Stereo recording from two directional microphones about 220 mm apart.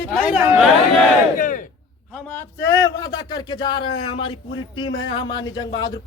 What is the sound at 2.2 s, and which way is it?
A man's voice, 10° left (ahead or behind).